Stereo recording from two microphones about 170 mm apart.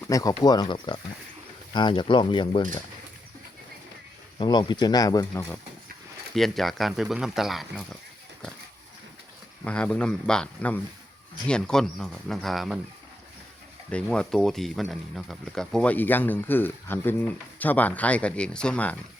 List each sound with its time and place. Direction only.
0.0 s speech: 20° left (ahead or behind)
4.4 s speech: 25° left (ahead or behind)
6.3 s speech: centre (ahead or behind)
9.6 s speech: 5° left (ahead or behind)
13.9 s speech: 5° left (ahead or behind)